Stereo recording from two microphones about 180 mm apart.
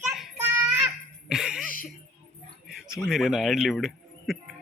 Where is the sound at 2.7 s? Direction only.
Centre (ahead or behind).